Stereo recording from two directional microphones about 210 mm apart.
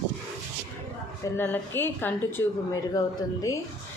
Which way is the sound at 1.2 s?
10° left (ahead or behind).